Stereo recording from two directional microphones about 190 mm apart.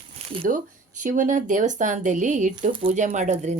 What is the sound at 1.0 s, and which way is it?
Speech, 45° right (ahead or behind).